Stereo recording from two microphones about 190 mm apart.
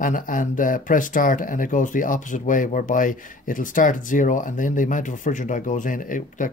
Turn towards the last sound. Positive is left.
turn(degrees=45)  # may be behind; listen again after turning